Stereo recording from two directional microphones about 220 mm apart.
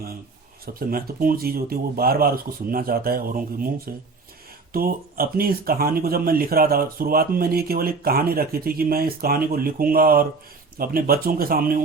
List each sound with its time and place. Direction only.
0.6 s speech: 40° right (ahead or behind)